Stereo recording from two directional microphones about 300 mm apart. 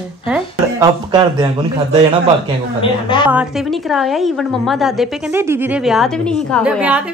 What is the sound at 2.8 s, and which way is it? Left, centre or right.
Speech, centre.